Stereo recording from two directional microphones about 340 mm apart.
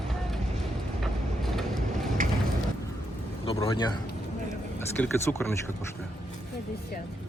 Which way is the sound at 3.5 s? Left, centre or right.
Centre.